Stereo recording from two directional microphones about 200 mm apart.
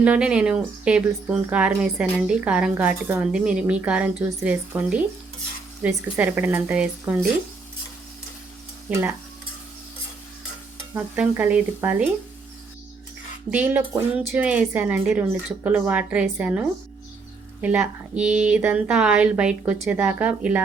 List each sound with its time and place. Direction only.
0.0 s speech: 5° right (ahead or behind)
8.9 s speech: 10° right (ahead or behind)
10.9 s speech: 10° right (ahead or behind)
13.5 s speech: 10° right (ahead or behind)